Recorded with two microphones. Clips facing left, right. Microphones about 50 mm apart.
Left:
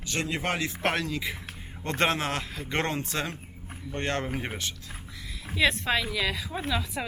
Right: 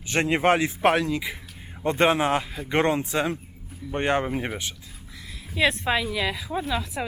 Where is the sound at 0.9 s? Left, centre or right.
Centre.